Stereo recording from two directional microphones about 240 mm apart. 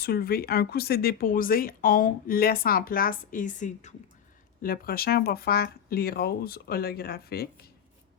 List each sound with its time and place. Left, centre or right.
0.0 s speech: left